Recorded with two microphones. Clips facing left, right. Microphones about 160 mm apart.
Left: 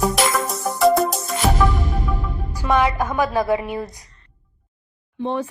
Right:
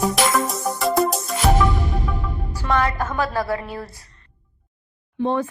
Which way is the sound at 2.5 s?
15° left (ahead or behind).